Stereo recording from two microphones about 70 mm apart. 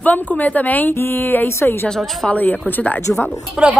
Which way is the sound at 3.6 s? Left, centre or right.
Centre.